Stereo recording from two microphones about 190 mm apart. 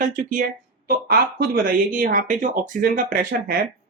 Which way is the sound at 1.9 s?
45° right (ahead or behind).